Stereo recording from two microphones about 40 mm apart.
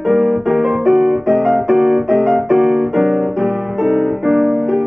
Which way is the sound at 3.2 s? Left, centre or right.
Centre.